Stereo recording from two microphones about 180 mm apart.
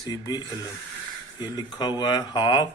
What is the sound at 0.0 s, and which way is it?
Speech, 20° left (ahead or behind).